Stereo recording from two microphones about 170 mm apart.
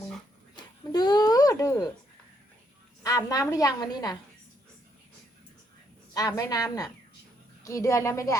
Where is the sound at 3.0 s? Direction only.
20° left (ahead or behind).